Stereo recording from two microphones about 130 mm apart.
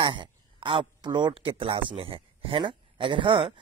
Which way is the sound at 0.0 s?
40° right (ahead or behind).